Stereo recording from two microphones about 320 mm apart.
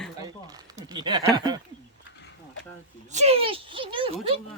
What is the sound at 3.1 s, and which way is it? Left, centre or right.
Speech, centre.